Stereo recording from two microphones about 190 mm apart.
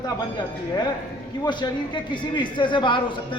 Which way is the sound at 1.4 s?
25° left (ahead or behind).